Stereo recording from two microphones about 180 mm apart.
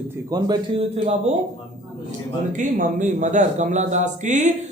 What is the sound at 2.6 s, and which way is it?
A man's voice, 45° right (ahead or behind).